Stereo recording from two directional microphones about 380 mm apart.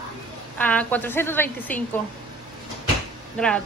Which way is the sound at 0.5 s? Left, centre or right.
Centre.